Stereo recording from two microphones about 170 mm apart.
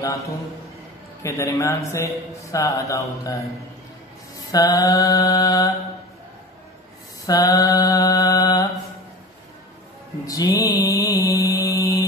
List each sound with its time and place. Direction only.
0.0 s mantra: 20° left (ahead or behind)
1.2 s a man's voice: 15° left (ahead or behind)
1.9 s mantra: 15° left (ahead or behind)
4.5 s mantra: 20° left (ahead or behind)
7.2 s mantra: 20° left (ahead or behind)
10.2 s mantra: 20° left (ahead or behind)